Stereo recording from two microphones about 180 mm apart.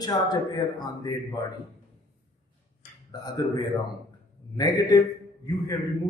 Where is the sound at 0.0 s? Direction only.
20° left (ahead or behind).